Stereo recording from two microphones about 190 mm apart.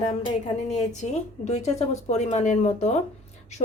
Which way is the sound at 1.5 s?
35° left (ahead or behind).